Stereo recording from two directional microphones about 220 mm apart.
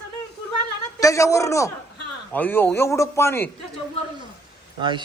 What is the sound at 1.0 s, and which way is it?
A man's voice, 15° left (ahead or behind).